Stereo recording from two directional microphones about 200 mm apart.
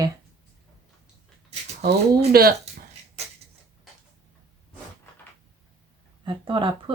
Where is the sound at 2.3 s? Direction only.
50° right (ahead or behind).